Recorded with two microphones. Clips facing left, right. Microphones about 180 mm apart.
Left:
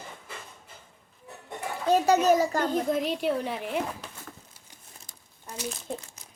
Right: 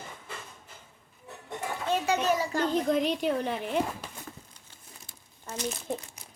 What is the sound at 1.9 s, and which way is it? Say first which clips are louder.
Speech: left 6 dB; 40° left (ahead or behind).